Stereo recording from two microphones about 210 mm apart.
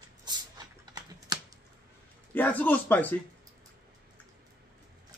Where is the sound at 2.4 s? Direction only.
10° left (ahead or behind).